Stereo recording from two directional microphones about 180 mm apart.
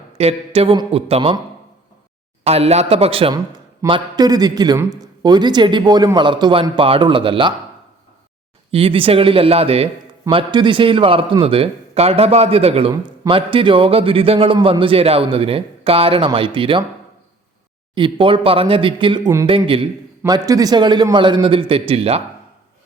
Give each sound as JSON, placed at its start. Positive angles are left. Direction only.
{"t": 0.2, "sound": "a man's voice", "side_deg": -35}
{"t": 2.4, "sound": "a man's voice", "side_deg": -35}
{"t": 8.7, "sound": "a man's voice", "side_deg": -30}
{"t": 17.9, "sound": "a man's voice", "side_deg": -30}